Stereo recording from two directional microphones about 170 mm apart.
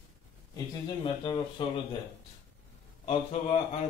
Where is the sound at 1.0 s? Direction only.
25° left (ahead or behind).